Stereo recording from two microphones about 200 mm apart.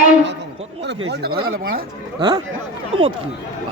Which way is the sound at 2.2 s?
20° right (ahead or behind).